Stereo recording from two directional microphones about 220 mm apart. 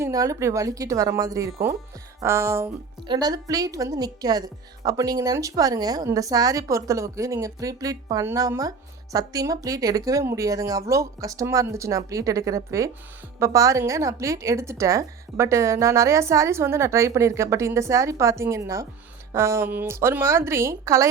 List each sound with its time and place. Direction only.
0.0 s speech: 15° right (ahead or behind)